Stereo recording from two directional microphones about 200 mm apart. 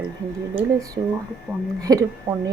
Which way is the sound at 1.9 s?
20° right (ahead or behind).